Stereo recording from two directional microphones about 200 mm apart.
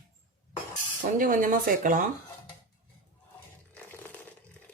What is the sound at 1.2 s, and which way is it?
Speech, 40° right (ahead or behind).